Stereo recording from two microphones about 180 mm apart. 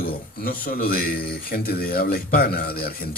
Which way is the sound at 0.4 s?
55° left (ahead or behind).